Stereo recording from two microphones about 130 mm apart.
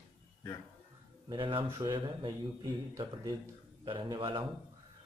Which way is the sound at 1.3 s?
40° right (ahead or behind).